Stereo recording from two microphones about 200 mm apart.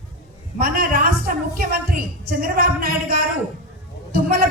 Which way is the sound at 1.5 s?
50° right (ahead or behind).